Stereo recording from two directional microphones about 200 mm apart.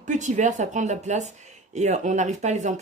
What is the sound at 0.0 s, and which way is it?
Speech, 40° right (ahead or behind).